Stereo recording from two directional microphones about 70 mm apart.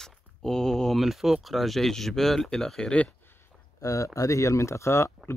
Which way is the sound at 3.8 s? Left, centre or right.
Left.